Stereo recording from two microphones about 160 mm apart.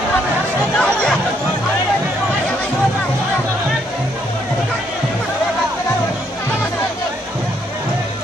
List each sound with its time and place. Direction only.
0.7 s chatter: 5° left (ahead or behind)